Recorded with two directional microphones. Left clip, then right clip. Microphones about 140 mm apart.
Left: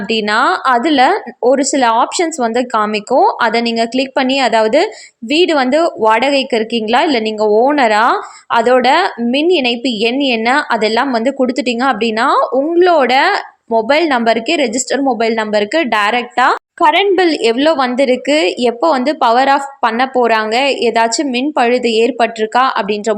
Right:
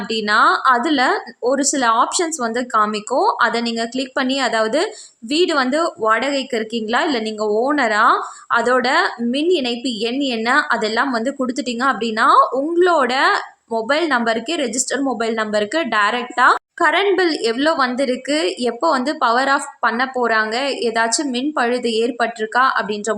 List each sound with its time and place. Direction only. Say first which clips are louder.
0.1 s a woman's voice: left 2 dB; 15° left (ahead or behind)